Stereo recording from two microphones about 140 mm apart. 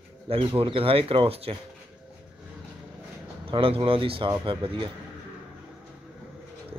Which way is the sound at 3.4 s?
40° right (ahead or behind).